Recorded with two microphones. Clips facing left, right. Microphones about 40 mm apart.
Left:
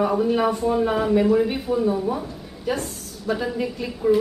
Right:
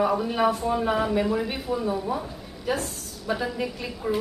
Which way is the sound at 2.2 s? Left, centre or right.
Centre.